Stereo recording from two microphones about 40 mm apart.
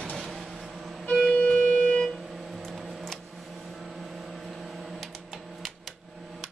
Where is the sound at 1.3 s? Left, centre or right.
Left.